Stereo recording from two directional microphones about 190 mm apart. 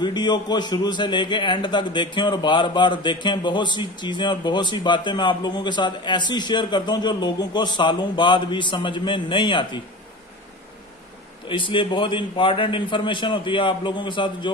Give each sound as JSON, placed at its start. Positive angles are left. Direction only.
{"t": 0.0, "sound": "a man's voice", "side_deg": 20}
{"t": 11.4, "sound": "a man's voice", "side_deg": 25}